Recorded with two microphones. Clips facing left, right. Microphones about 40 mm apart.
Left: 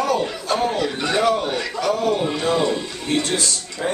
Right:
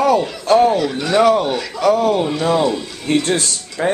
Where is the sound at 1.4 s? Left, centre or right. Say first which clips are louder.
Right 3 dB; centre.